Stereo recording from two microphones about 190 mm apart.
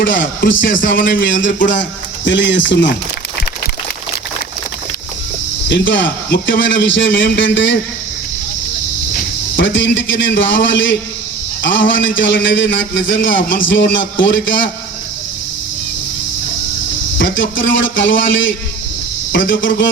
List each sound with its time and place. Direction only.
0.0 s a man's voice: 75° left (ahead or behind)
1.5 s speech: 45° left (ahead or behind)
1.7 s a man's voice: 70° left (ahead or behind)
5.6 s a man's voice: 70° left (ahead or behind)
6.3 s a man's voice: 60° left (ahead or behind)
9.6 s a man's voice: 75° left (ahead or behind)
17.2 s a man's voice: 70° left (ahead or behind)